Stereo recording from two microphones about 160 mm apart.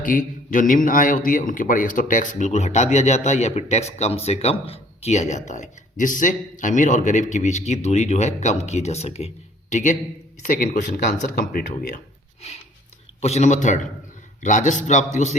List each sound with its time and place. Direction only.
0.0 s a man's voice: 55° left (ahead or behind)
13.2 s a man's voice: 45° left (ahead or behind)